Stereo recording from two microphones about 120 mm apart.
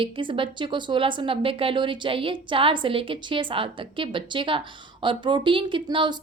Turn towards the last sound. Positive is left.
turn(degrees=-40)  # may be behind; listen again after turning